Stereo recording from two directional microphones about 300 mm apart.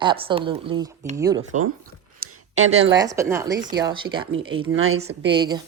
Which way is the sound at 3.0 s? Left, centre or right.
Centre.